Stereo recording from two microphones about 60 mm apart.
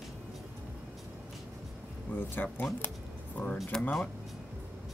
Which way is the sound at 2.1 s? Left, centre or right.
Left.